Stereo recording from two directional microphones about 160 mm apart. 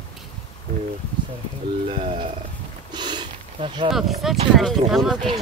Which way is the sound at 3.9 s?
Centre (ahead or behind).